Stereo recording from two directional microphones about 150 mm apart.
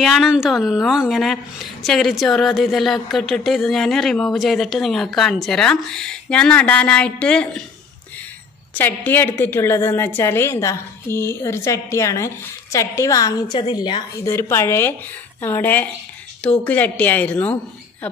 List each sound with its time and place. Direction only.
0.0 s a woman's voice: centre (ahead or behind)
8.7 s a woman's voice: 10° left (ahead or behind); by 14.2 s 30° left (ahead or behind)
14.2 s a woman's voice: 15° left (ahead or behind)